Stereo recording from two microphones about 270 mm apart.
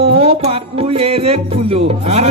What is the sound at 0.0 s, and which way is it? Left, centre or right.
Music, right.